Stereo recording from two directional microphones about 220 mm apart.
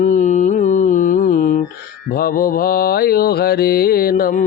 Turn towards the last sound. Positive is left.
turn(degrees=40)  # may be behind; listen again after turning